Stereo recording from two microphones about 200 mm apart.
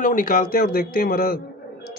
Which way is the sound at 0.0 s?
45° left (ahead or behind).